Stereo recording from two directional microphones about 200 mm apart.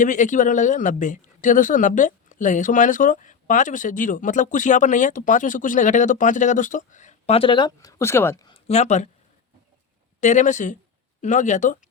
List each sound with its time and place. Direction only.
0.0 s speech: 40° left (ahead or behind); by 8.5 s 10° left (ahead or behind)
8.5 s speech: 30° left (ahead or behind)
10.2 s speech: 35° left (ahead or behind)